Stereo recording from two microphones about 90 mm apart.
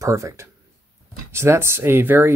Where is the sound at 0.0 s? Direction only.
35° right (ahead or behind).